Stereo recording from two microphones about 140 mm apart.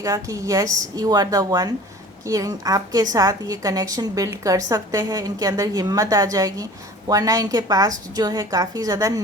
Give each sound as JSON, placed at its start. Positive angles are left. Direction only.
{"t": 0.0, "sound": "a woman's voice", "side_deg": -25}